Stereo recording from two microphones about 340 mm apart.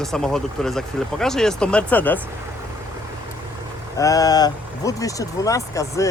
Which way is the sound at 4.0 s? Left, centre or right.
Centre.